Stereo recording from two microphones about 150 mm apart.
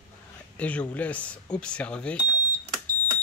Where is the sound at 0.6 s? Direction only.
10° left (ahead or behind).